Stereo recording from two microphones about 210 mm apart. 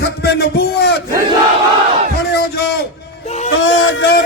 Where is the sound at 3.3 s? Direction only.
30° left (ahead or behind).